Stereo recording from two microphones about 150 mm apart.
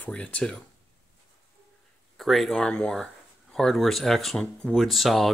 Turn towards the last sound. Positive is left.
turn(degrees=0)  # may be behind; listen again after turning